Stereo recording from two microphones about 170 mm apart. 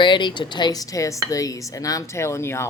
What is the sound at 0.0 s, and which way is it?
Speech, 25° left (ahead or behind).